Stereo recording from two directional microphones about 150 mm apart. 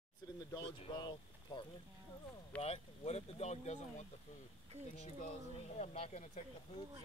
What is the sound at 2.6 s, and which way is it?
Speech, 45° left (ahead or behind).